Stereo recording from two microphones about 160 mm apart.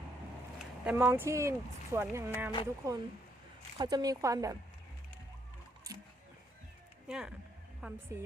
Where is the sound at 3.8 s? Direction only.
25° right (ahead or behind).